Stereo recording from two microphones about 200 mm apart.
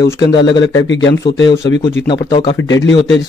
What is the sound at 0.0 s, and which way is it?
Speech, 20° left (ahead or behind).